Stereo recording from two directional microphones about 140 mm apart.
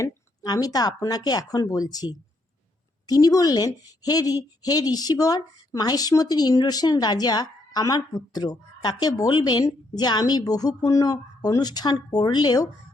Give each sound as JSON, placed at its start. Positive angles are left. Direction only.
{"t": 0.0, "sound": "a woman's voice", "side_deg": 25}